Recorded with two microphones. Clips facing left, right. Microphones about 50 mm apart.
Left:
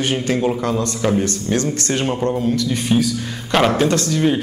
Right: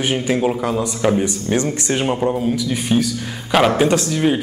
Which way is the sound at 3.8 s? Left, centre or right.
Centre.